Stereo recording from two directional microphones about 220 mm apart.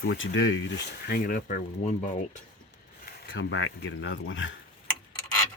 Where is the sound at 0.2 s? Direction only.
60° left (ahead or behind); by 2.4 s 35° left (ahead or behind).